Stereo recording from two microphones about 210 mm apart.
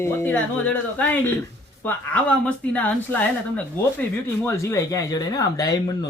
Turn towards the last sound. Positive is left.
turn(degrees=20)  # may be behind; listen again after turning